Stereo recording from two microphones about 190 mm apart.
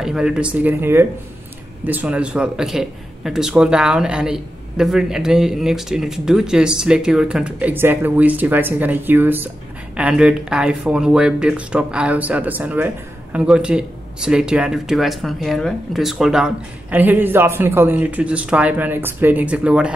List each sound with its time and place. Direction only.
0.0 s speech: 5° right (ahead or behind)